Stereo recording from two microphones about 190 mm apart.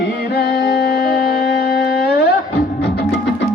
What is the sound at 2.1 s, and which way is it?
Music, 55° left (ahead or behind).